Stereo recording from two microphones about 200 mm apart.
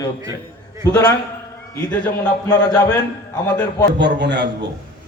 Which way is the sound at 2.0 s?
15° left (ahead or behind).